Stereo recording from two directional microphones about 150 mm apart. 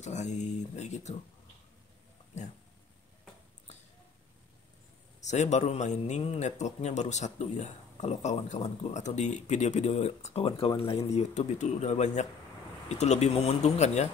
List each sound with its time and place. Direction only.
0.0 s a man's voice: 50° left (ahead or behind)
5.2 s a man's voice: 50° left (ahead or behind)